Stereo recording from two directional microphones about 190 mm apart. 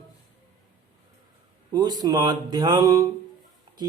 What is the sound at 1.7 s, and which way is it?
Speech, 20° right (ahead or behind).